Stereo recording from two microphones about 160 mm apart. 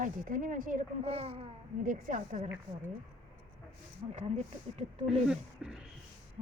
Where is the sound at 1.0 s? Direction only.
40° right (ahead or behind).